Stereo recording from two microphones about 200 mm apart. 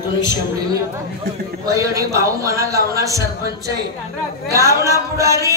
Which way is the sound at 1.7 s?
15° right (ahead or behind).